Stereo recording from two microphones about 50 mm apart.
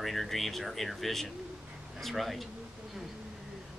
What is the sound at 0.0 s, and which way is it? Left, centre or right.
Speech, centre.